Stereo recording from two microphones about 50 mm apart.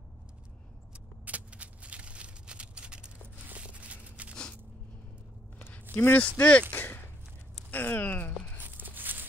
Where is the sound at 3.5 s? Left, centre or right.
Right.